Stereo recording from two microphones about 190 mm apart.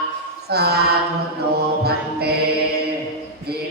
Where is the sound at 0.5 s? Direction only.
60° right (ahead or behind).